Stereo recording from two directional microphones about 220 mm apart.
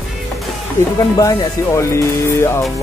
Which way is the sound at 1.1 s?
15° left (ahead or behind).